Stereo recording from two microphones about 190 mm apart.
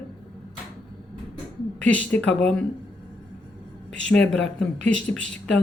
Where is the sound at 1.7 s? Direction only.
5° left (ahead or behind).